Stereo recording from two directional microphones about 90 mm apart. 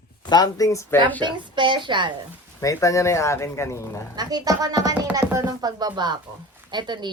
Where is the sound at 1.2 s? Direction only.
60° right (ahead or behind).